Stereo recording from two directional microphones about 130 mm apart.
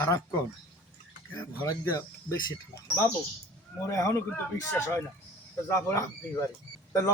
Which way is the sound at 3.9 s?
20° left (ahead or behind).